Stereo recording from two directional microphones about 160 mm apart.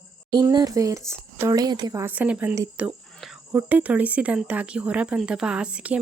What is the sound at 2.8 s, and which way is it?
Speech, 5° right (ahead or behind).